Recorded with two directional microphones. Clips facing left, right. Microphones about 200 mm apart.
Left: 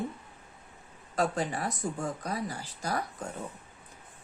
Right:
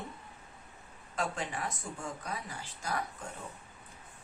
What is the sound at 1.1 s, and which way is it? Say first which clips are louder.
Speech: left 6 dB; 35° left (ahead or behind).